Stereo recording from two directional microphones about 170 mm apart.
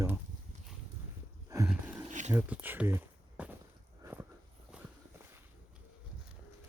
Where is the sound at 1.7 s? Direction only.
5° right (ahead or behind).